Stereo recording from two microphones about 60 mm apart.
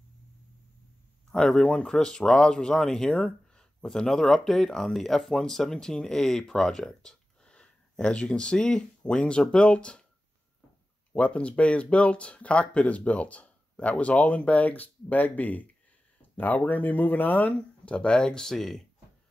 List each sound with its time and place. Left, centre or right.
1.3 s speech: centre
11.1 s speech: centre